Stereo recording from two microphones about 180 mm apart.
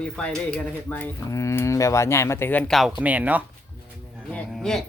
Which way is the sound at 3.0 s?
10° right (ahead or behind).